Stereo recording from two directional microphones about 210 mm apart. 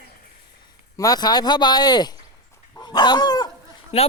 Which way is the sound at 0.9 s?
20° left (ahead or behind).